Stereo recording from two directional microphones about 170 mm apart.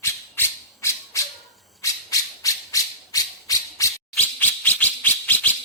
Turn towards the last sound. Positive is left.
turn(degrees=10)  # may be behind; listen again after turning